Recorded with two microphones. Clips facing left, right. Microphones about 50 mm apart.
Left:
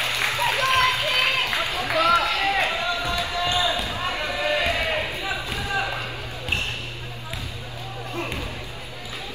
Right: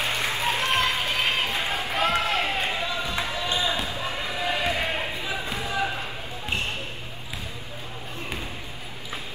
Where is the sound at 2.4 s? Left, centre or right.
Left.